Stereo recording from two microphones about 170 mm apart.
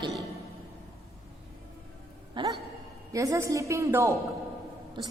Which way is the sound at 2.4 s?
25° right (ahead or behind).